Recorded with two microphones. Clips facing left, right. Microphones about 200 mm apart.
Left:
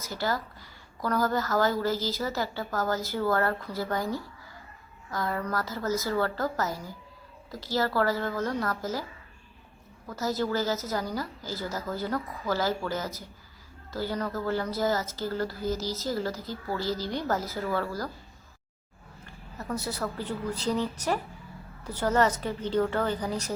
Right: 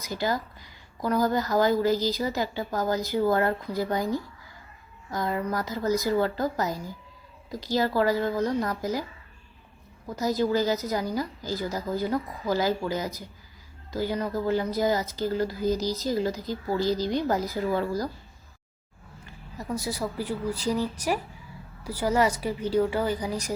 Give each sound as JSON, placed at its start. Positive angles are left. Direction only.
{"t": 0.0, "sound": "speech", "side_deg": -15}
{"t": 10.1, "sound": "speech", "side_deg": -15}
{"t": 19.5, "sound": "speech", "side_deg": -10}